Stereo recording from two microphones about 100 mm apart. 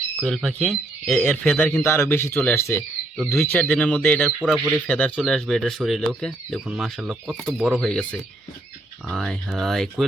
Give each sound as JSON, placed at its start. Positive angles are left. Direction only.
{"t": 0.2, "sound": "speech", "side_deg": 0}
{"t": 1.2, "sound": "speech", "side_deg": 15}
{"t": 3.2, "sound": "speech", "side_deg": 0}
{"t": 9.0, "sound": "speech", "side_deg": 5}